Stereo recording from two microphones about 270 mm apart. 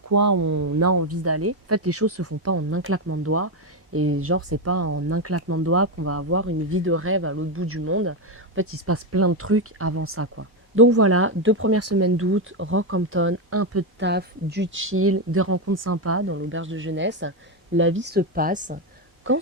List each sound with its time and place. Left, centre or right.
0.1 s speech: right
14.0 s speech: right
19.3 s speech: right